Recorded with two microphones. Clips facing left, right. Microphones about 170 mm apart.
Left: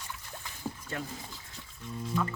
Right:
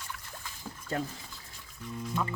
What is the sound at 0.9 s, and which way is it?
Speech, 40° right (ahead or behind).